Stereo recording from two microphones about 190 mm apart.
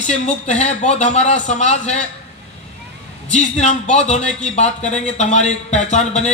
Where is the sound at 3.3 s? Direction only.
40° left (ahead or behind).